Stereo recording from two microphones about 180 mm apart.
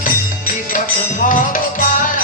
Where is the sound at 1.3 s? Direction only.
45° left (ahead or behind).